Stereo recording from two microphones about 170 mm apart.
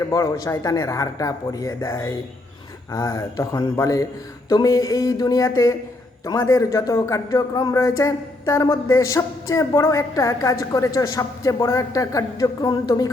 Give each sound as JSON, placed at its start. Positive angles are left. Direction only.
{"t": 0.1, "sound": "a man's voice", "side_deg": 20}